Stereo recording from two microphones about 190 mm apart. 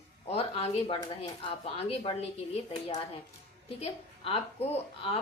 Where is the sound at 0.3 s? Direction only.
30° left (ahead or behind).